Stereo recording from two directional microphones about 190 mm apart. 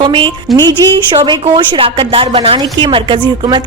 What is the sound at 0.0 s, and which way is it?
A woman's voice, 25° right (ahead or behind).